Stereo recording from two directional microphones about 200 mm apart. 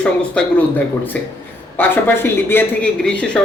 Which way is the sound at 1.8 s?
10° left (ahead or behind).